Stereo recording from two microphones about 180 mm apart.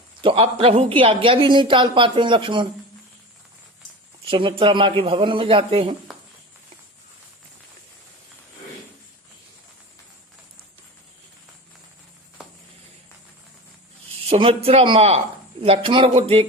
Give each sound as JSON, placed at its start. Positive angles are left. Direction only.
{"t": 0.2, "sound": "speech", "side_deg": -30}
{"t": 4.3, "sound": "speech", "side_deg": -30}
{"t": 14.4, "sound": "a man's voice", "side_deg": -35}